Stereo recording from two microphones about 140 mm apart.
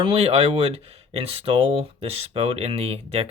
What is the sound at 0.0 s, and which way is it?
Speech, 45° right (ahead or behind).